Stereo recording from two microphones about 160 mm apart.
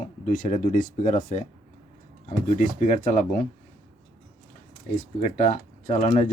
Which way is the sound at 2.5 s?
50° left (ahead or behind).